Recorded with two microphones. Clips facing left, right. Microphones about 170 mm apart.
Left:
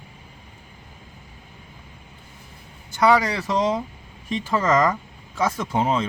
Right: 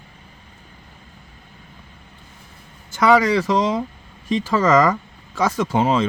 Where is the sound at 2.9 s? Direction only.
90° right.